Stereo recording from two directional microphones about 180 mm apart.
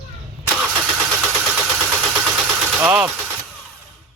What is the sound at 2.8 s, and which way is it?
Engine, 10° right (ahead or behind).